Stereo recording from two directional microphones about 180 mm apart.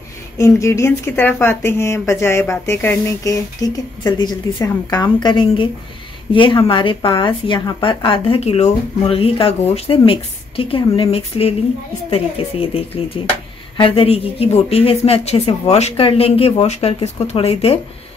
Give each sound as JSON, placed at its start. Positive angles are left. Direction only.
{"t": 0.4, "sound": "speech", "side_deg": 15}